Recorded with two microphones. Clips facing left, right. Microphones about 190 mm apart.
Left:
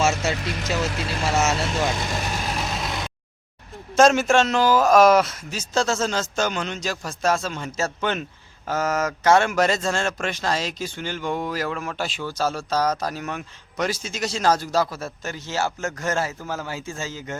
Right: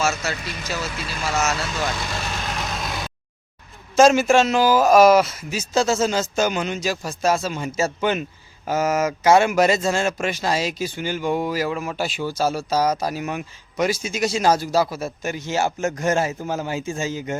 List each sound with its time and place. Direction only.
0.0 s speech: 25° left (ahead or behind)
2.7 s vehicle: centre (ahead or behind)
3.9 s speech: centre (ahead or behind)